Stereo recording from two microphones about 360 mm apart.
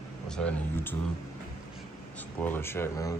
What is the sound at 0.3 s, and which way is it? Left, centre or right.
Speech, centre.